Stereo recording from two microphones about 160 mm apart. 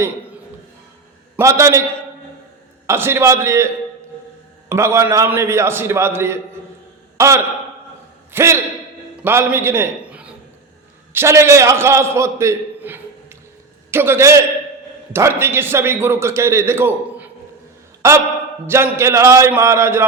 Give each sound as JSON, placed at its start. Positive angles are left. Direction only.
{"t": 1.4, "sound": "a man's voice", "side_deg": -20}
{"t": 2.8, "sound": "a man's voice", "side_deg": -15}
{"t": 4.7, "sound": "a man's voice", "side_deg": -15}